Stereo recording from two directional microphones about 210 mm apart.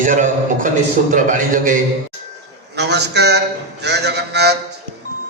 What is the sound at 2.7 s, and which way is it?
A man's voice, 55° right (ahead or behind).